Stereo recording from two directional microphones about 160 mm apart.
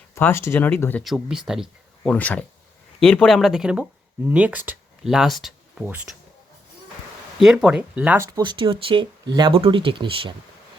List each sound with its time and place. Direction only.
0.1 s speech: 15° left (ahead or behind)
1.0 s speech: centre (ahead or behind)
2.1 s speech: 10° left (ahead or behind); by 6.1 s 10° right (ahead or behind)
7.3 s speech: 5° right (ahead or behind)
8.3 s speech: 30° right (ahead or behind)